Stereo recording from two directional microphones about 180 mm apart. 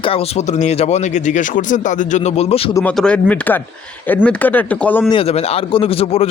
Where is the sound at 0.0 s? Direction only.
35° left (ahead or behind).